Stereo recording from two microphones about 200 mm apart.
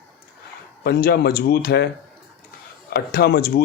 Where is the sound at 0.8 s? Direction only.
50° left (ahead or behind).